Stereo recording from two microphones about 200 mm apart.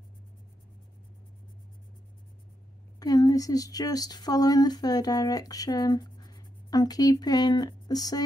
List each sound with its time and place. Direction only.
3.0 s speech: 20° left (ahead or behind)